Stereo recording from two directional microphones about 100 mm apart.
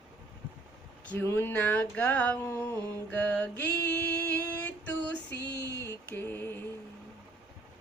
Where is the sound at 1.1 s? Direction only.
20° left (ahead or behind).